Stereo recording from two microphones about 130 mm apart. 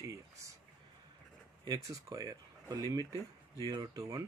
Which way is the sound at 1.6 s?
30° right (ahead or behind).